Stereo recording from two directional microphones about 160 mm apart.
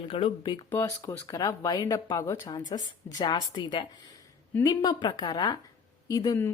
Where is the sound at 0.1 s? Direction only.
30° left (ahead or behind).